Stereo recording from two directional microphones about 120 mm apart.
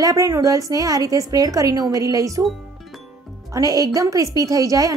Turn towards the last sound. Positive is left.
turn(degrees=-30)  # may be behind; listen again after turning